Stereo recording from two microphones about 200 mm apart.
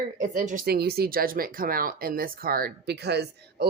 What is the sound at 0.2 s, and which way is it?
Speech, 40° right (ahead or behind).